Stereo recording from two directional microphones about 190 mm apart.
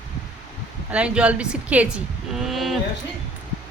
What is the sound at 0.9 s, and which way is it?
A woman's voice, 5° right (ahead or behind).